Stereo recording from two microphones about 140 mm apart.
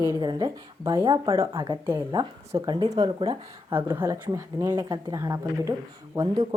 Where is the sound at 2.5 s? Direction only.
25° right (ahead or behind).